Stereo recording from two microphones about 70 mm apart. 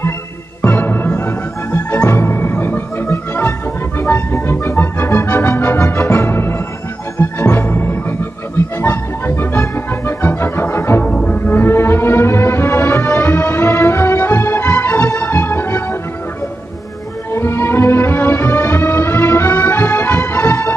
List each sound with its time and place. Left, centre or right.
0.6 s music: left
7.2 s organ: left
8.8 s music: left
11.1 s music: centre
11.3 s music: left
17.3 s music: left